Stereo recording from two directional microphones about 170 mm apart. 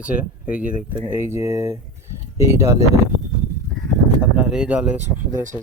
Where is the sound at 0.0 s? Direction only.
5° right (ahead or behind).